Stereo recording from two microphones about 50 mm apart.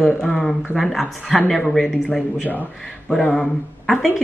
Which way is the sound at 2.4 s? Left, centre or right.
Left.